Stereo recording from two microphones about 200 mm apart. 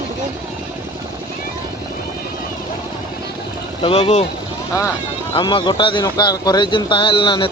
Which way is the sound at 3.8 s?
30° left (ahead or behind).